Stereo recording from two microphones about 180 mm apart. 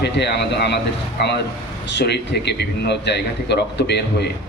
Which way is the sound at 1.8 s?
70° left (ahead or behind).